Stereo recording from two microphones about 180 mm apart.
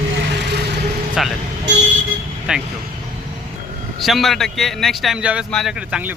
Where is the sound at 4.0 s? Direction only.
Centre (ahead or behind).